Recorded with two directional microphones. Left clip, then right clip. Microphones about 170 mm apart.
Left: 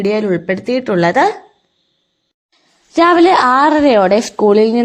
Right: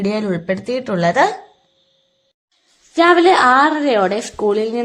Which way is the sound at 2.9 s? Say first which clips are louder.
Left 2 dB; 40° left (ahead or behind).